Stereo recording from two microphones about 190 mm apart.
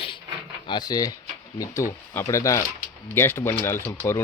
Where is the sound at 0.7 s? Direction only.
20° left (ahead or behind).